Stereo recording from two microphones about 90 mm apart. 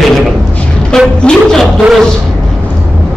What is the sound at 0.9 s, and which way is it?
Speech, 5° left (ahead or behind).